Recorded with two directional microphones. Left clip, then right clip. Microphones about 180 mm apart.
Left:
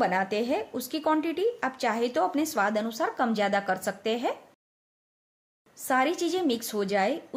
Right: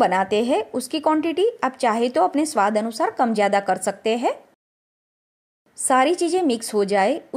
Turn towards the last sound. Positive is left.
turn(degrees=-40)  # may be behind; listen again after turning